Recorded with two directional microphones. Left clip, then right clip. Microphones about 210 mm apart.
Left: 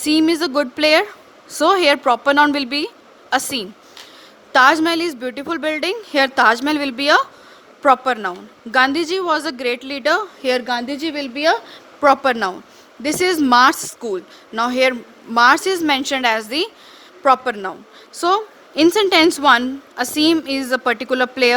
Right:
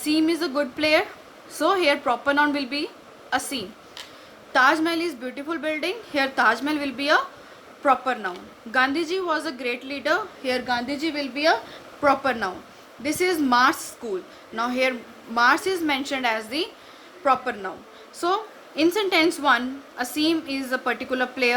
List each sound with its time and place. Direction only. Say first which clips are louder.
0.0 s a woman's voice: left 6 dB; 55° left (ahead or behind)